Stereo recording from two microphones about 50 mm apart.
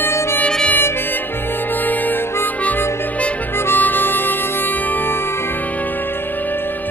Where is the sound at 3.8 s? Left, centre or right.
Left.